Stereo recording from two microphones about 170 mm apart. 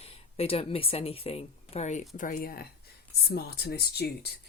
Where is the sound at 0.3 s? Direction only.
35° left (ahead or behind).